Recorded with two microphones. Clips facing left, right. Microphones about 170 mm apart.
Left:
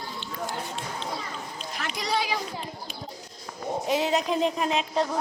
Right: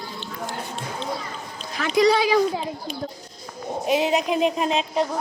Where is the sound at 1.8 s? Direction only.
80° right.